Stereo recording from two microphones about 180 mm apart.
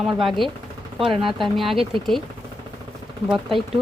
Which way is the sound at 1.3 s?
Centre (ahead or behind).